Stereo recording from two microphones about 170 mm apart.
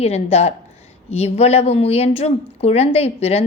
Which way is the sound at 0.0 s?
40° left (ahead or behind).